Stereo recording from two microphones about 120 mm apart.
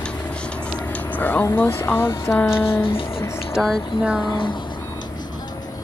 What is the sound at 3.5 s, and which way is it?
Music, centre (ahead or behind).